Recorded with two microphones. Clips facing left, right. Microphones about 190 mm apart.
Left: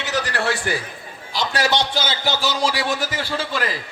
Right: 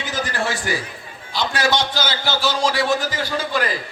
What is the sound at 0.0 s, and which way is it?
Speech, 70° left (ahead or behind).